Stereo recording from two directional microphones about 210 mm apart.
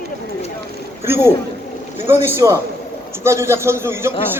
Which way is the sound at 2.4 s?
15° right (ahead or behind).